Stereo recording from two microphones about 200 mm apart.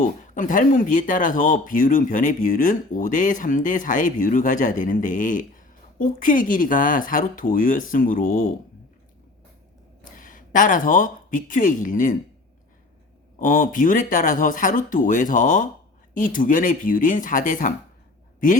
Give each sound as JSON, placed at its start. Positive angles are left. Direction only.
{"t": 0.0, "sound": "speech", "side_deg": 40}
{"t": 10.0, "sound": "speech", "side_deg": 40}
{"t": 13.4, "sound": "speech", "side_deg": 45}